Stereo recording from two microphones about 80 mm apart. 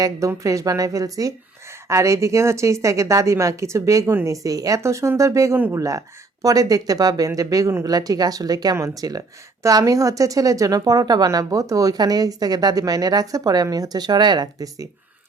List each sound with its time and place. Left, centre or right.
0.4 s a woman's voice: right
11.3 s speech: right